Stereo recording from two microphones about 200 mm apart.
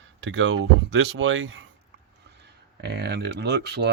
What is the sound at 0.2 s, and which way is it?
Speech, 65° right (ahead or behind).